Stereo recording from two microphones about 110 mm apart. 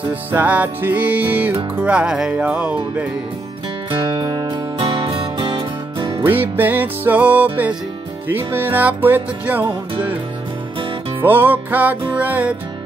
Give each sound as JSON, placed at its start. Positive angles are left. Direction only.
{"t": 0.1, "sound": "music", "side_deg": -15}
{"t": 3.9, "sound": "music", "side_deg": -45}
{"t": 6.2, "sound": "music", "side_deg": -20}
{"t": 11.1, "sound": "music", "side_deg": -20}